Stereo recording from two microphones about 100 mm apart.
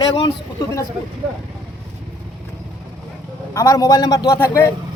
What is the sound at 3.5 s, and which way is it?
Speech, 35° left (ahead or behind).